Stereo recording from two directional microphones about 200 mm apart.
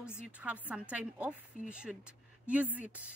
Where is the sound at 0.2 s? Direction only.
5° right (ahead or behind).